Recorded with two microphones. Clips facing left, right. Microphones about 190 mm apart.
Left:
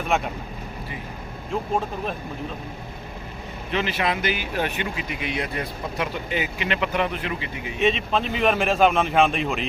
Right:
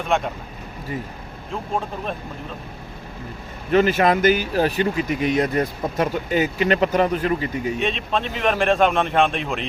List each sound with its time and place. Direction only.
0.1 s a man's voice: 5° left (ahead or behind)
3.7 s speech: 45° right (ahead or behind)
7.8 s a man's voice: centre (ahead or behind)